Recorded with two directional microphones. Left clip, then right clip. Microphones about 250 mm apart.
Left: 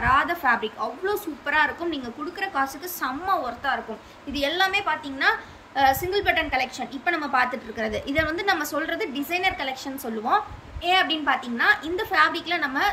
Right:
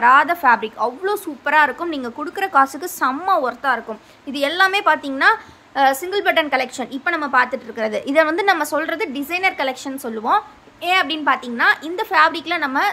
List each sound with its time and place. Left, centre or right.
0.0 s a woman's voice: centre